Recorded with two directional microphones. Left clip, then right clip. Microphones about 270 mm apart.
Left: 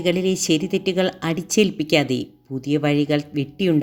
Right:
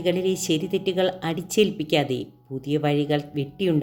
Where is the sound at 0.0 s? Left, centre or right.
Left.